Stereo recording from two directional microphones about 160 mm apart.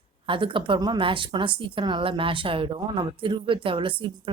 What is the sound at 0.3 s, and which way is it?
A woman's voice, 30° right (ahead or behind).